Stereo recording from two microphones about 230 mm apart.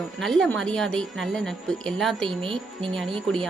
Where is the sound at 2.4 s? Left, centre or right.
Right.